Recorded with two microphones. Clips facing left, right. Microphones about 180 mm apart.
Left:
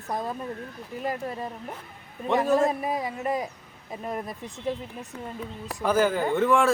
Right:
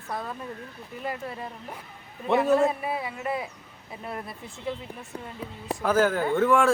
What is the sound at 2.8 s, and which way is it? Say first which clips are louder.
Speech: left 2 dB; 40° left (ahead or behind).